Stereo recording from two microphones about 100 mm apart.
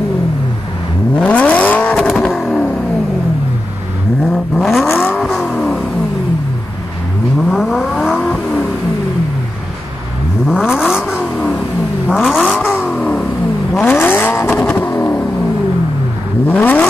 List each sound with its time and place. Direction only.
1.1 s vehicle: 10° left (ahead or behind)
4.2 s vehicle: centre (ahead or behind)
7.4 s vehicle: centre (ahead or behind)
10.6 s vehicle: 5° right (ahead or behind)
12.7 s vehicle: 15° left (ahead or behind)
13.7 s vehicle: 20° left (ahead or behind)
14.5 s vehicle: 10° left (ahead or behind)
14.8 s vehicle: 20° left (ahead or behind)
16.4 s vehicle: 15° left (ahead or behind)